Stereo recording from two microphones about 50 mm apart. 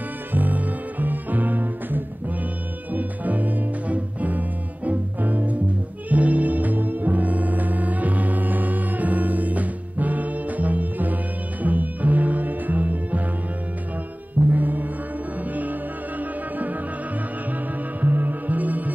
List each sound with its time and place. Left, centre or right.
0.3 s music: right
14.5 s music: right
16.2 s music: right
18.0 s music: right